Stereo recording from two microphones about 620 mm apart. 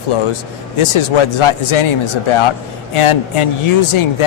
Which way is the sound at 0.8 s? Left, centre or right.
Left.